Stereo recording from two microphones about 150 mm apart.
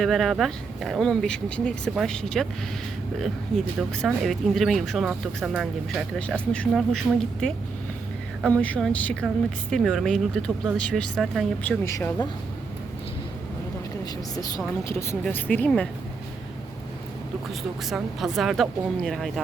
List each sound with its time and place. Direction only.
0.0 s speech: centre (ahead or behind)
8.4 s speech: 10° left (ahead or behind)
11.9 s speech: 20° left (ahead or behind)
14.0 s a woman's voice: 25° left (ahead or behind); by 15.9 s 10° left (ahead or behind)
17.8 s speech: centre (ahead or behind)